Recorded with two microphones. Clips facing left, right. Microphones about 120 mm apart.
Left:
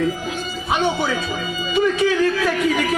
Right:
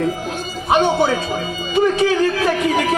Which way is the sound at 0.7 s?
50° right (ahead or behind).